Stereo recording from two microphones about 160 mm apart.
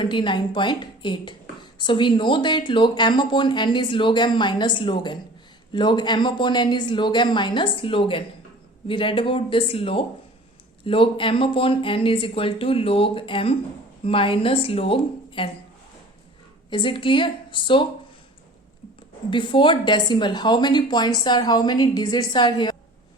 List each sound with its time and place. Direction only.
0.0 s speech: 30° left (ahead or behind)
16.6 s speech: 30° left (ahead or behind)
19.3 s speech: 30° left (ahead or behind)